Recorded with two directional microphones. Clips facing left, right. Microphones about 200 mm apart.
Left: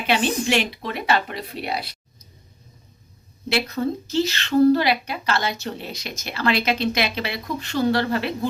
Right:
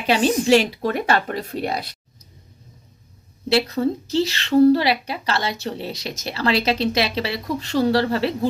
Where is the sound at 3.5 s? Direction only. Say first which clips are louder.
Right 4 dB; 30° right (ahead or behind).